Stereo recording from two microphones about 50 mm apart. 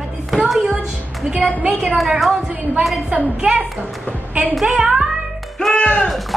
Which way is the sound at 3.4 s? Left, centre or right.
Centre.